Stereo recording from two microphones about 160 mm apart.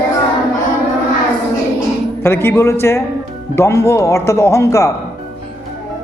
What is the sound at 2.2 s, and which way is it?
Speech, 15° left (ahead or behind).